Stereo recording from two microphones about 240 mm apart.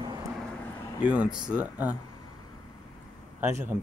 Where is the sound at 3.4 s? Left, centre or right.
Centre.